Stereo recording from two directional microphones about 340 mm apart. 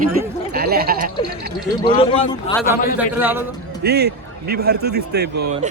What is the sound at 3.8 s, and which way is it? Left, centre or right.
A man's voice, right.